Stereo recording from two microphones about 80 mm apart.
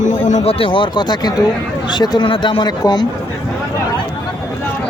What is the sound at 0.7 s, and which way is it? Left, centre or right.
Speech, left.